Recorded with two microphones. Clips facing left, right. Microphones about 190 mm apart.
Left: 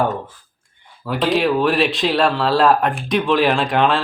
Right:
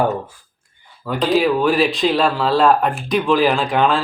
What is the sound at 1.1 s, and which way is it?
Speech, centre (ahead or behind).